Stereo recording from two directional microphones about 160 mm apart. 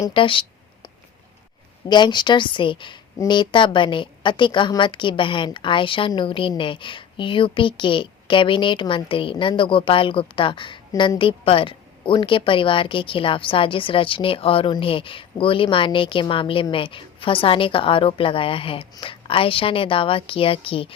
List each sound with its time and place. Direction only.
0.0 s a woman's voice: 30° left (ahead or behind)
1.9 s a woman's voice: 30° left (ahead or behind)